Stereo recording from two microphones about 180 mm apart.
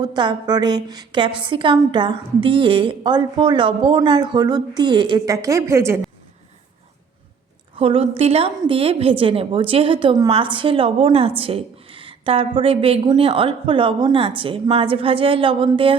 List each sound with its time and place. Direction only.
0.0 s a woman's voice: 25° right (ahead or behind)
7.8 s a woman's voice: 30° right (ahead or behind)